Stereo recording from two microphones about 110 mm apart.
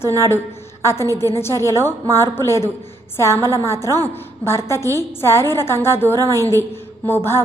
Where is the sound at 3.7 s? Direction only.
25° left (ahead or behind).